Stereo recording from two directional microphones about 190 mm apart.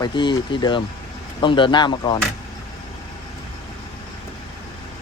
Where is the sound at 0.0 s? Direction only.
25° left (ahead or behind).